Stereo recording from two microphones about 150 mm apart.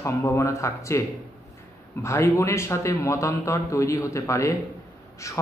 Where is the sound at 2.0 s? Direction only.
20° left (ahead or behind).